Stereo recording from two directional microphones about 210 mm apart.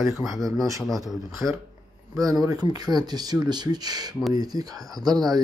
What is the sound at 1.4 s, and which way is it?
Speech, 10° right (ahead or behind).